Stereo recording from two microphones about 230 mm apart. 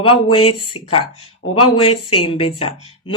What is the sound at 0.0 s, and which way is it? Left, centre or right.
Speech, left.